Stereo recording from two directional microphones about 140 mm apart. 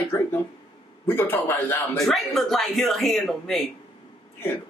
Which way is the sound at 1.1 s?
15° left (ahead or behind).